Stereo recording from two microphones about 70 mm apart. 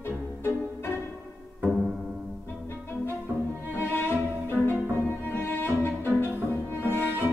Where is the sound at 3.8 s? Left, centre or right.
Left.